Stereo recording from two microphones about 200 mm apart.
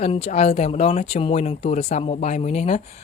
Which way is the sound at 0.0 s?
35° left (ahead or behind).